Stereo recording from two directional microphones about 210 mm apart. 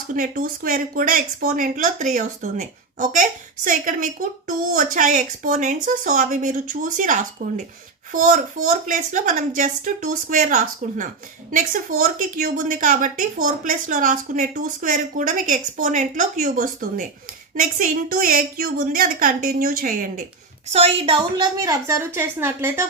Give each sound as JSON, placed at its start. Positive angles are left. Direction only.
{"t": 0.1, "sound": "a woman's voice", "side_deg": -40}
{"t": 20.7, "sound": "a woman's voice", "side_deg": -30}